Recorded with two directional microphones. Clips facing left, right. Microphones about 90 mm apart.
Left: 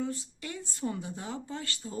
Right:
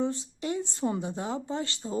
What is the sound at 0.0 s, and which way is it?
Speech, 25° right (ahead or behind).